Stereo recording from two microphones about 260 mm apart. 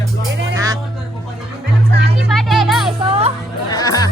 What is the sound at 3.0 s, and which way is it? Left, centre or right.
Speech, right.